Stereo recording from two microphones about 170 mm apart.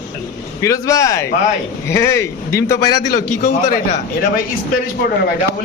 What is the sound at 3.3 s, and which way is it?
Speech, 50° left (ahead or behind).